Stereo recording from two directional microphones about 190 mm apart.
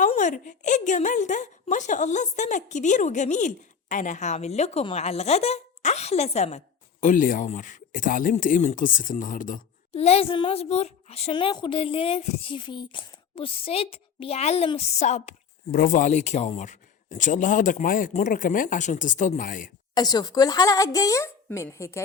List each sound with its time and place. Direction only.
0.0 s a woman's voice: 40° left (ahead or behind)
9.9 s a woman's voice: 30° left (ahead or behind)
19.9 s speech: 20° left (ahead or behind)